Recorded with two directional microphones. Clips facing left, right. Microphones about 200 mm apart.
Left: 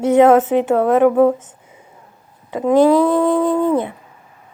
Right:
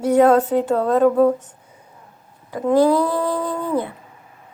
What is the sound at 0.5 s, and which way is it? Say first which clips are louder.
Speech: left 3 dB; 85° left.